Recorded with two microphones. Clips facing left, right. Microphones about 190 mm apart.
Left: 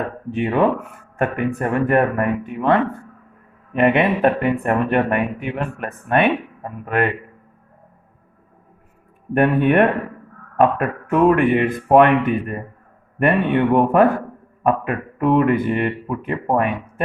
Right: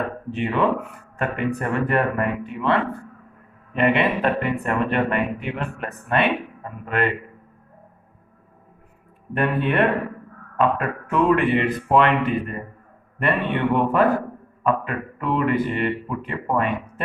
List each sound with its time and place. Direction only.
0.3 s speech: 50° left (ahead or behind)
3.8 s speech: 50° left (ahead or behind)
9.3 s speech: 55° left (ahead or behind)